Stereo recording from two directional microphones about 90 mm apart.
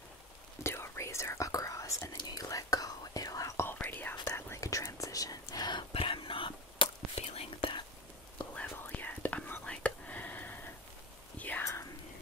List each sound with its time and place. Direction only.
0.7 s whispering: 30° left (ahead or behind)
3.7 s whispering: 20° left (ahead or behind)
4.5 s whispering: 35° left (ahead or behind); by 7.8 s 75° left (ahead or behind)
8.8 s whispering: 20° left (ahead or behind)
11.6 s whispering: 35° left (ahead or behind)